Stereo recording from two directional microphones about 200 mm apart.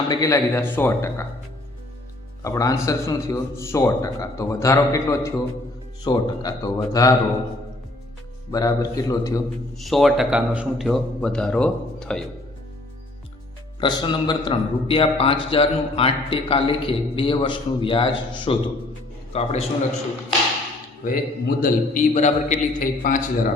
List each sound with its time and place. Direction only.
0.1 s a man's voice: 15° left (ahead or behind)
2.4 s a man's voice: 15° left (ahead or behind)
8.5 s a man's voice: 20° left (ahead or behind)
9.7 s a man's voice: centre (ahead or behind)
13.8 s a man's voice: 20° left (ahead or behind)
21.0 s a man's voice: 45° left (ahead or behind)